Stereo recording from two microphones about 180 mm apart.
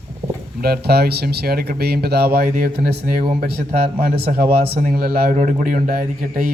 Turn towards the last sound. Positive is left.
turn(degrees=-50)  # may be behind; listen again after turning